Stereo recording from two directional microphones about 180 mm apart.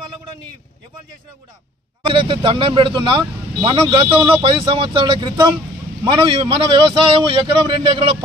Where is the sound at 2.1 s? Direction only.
30° right (ahead or behind).